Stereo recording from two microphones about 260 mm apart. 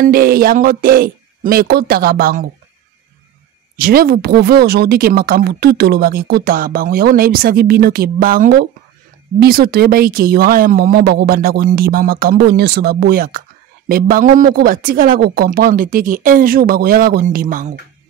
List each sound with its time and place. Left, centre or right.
0.0 s speech: right
3.7 s speech: right